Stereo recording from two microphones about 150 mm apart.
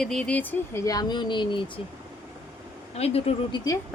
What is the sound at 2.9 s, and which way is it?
Speech, 45° left (ahead or behind).